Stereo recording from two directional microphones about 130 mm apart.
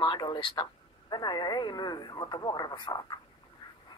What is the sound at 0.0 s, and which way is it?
Speech, 35° left (ahead or behind).